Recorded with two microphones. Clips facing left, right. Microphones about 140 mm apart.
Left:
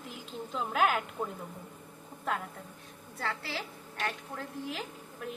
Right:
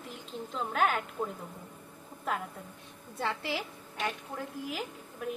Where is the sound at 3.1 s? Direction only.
20° right (ahead or behind).